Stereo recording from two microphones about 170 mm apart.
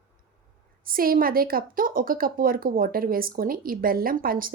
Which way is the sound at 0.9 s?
55° right (ahead or behind).